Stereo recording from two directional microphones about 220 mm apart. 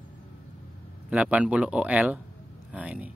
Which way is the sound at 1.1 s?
5° right (ahead or behind).